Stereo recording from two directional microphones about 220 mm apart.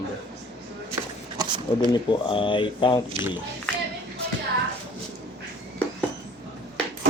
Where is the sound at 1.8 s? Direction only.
20° left (ahead or behind).